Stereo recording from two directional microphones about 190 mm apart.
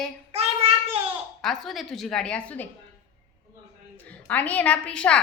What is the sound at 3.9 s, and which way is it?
A woman's voice, 10° left (ahead or behind).